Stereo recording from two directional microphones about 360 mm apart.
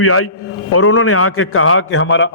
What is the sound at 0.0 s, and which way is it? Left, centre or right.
A man's voice, left.